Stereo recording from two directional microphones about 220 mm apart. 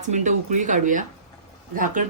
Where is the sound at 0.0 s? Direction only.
35° right (ahead or behind).